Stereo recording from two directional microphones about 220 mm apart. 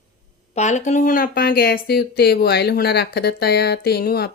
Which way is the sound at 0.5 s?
30° left (ahead or behind).